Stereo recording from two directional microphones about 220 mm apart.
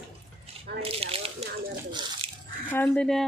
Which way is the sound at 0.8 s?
25° right (ahead or behind).